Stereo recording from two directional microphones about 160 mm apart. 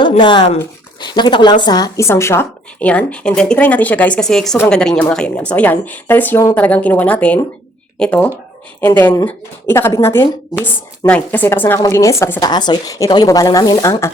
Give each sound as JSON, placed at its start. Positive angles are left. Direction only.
{"t": 0.2, "sound": "a woman's voice", "side_deg": 30}